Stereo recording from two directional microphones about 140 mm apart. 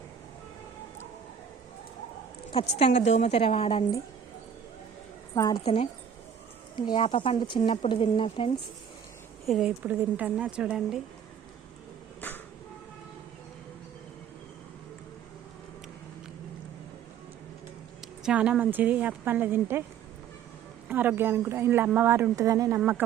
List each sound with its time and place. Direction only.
2.5 s speech: 45° left (ahead or behind)
5.3 s a woman's voice: 25° left (ahead or behind)
5.5 s speech: 45° left (ahead or behind)
6.7 s speech: 30° left (ahead or behind)
7.0 s speech: 45° left (ahead or behind)
9.5 s a woman's voice: 5° right (ahead or behind)
12.2 s music: 15° left (ahead or behind)
18.2 s a woman's voice: 5° right (ahead or behind)
20.8 s a woman's voice: 10° right (ahead or behind)